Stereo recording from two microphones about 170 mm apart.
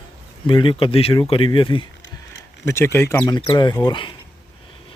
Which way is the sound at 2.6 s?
15° left (ahead or behind).